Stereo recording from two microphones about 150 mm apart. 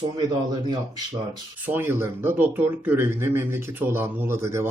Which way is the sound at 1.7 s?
15° right (ahead or behind).